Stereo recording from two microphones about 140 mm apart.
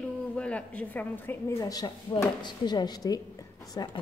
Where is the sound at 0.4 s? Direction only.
10° left (ahead or behind).